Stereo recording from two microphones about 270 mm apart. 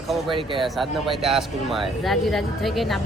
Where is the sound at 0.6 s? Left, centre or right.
Centre.